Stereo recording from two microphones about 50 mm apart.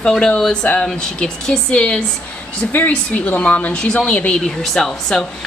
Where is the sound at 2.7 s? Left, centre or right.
Left.